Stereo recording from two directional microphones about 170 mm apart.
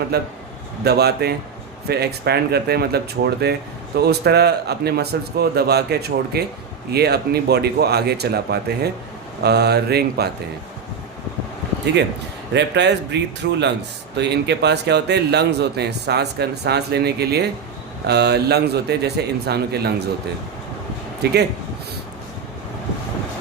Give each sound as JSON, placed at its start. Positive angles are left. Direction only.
{"t": 0.1, "sound": "a man's voice", "side_deg": -70}
{"t": 12.5, "sound": "a man's voice", "side_deg": -90}
{"t": 21.2, "sound": "a man's voice", "side_deg": -75}